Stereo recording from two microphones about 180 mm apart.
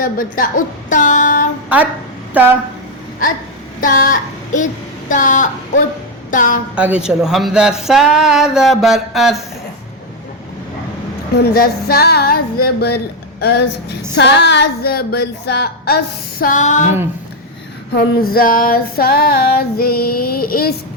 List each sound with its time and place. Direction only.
0.0 s a woman's voice: 50° left (ahead or behind)
1.7 s a woman's voice: 10° right (ahead or behind)
3.8 s a woman's voice: 50° left (ahead or behind)
6.7 s speech: 5° right (ahead or behind)
11.3 s female singing: 60° left (ahead or behind); by 17.0 s 40° left (ahead or behind)
17.9 s female singing: 55° left (ahead or behind)